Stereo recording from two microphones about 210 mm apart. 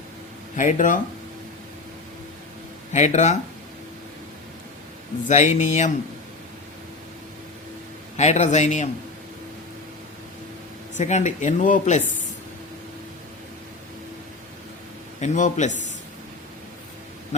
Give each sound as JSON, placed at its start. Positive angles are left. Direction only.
{"t": 0.5, "sound": "speech", "side_deg": 35}
{"t": 2.9, "sound": "speech", "side_deg": 35}
{"t": 5.3, "sound": "speech", "side_deg": 35}
{"t": 8.1, "sound": "speech", "side_deg": 30}
{"t": 10.9, "sound": "speech", "side_deg": 35}
{"t": 15.2, "sound": "speech", "side_deg": 35}